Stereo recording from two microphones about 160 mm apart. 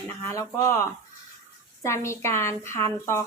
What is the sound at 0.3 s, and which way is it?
A woman's voice, 20° left (ahead or behind).